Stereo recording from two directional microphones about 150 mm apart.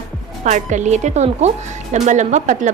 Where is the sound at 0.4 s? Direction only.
55° right (ahead or behind).